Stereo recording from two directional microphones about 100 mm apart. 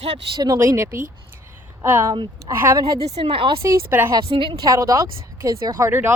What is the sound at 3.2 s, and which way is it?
Speech, 60° right (ahead or behind).